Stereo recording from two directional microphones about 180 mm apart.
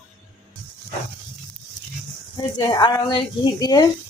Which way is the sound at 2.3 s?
25° left (ahead or behind).